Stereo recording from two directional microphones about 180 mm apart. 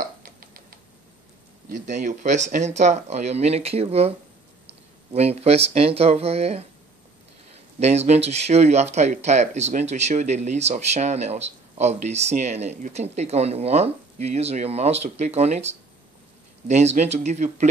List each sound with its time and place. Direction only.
0.2 s a sound: 55° right (ahead or behind)
1.7 s speech: 40° right (ahead or behind)
7.8 s speech: 35° right (ahead or behind)